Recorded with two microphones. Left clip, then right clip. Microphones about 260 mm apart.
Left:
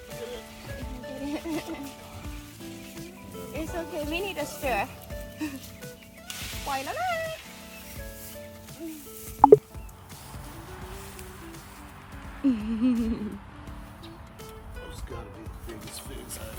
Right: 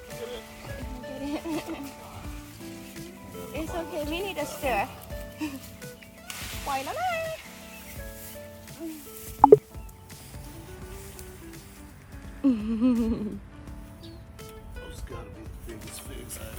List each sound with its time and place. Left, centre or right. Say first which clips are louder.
0.1 s music: even; centre
9.4 s a sound: even; centre
12.4 s music: right 1 dB; centre
15.6 s music: left 1 dB; centre